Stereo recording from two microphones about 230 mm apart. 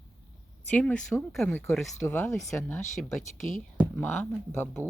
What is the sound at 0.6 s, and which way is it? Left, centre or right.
A woman's voice, centre.